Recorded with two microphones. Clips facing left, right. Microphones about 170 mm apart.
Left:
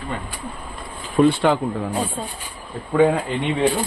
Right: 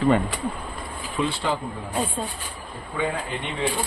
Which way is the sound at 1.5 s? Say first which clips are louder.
Left 7 dB; 60° left (ahead or behind).